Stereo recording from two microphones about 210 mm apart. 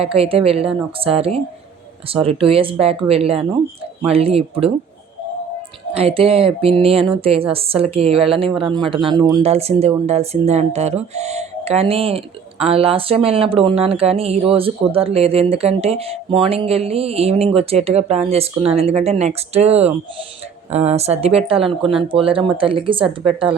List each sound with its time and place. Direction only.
0.0 s speech: 25° right (ahead or behind)
5.9 s speech: 30° right (ahead or behind)